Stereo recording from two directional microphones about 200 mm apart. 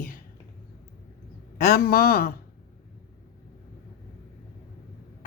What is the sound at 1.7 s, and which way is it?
Speech, 50° left (ahead or behind).